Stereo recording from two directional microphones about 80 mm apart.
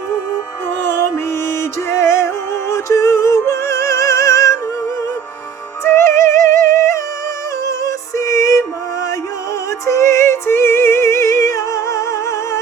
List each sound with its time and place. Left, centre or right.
0.9 s music: left
5.8 s music: left
9.8 s music: left